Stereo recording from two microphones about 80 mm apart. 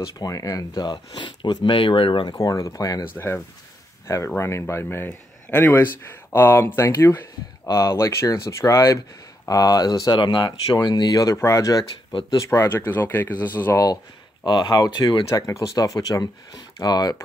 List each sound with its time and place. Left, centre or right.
0.2 s speech: left
2.3 s speech: left
4.4 s speech: left
7.6 s speech: left
10.1 s speech: left
12.4 s speech: left
14.4 s speech: left
15.3 s speech: left